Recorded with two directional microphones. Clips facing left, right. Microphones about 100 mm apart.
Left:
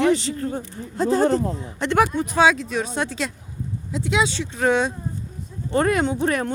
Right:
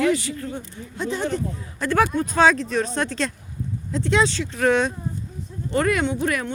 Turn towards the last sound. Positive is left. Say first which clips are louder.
# left 2 dB
turn(degrees=35)  # may be behind; listen again after turning